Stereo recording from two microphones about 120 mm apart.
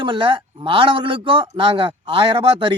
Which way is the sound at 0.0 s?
45° right (ahead or behind).